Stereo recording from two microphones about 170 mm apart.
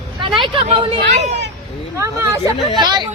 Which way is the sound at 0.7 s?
40° right (ahead or behind).